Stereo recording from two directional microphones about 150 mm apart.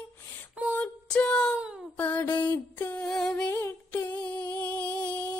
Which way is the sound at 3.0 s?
5° left (ahead or behind).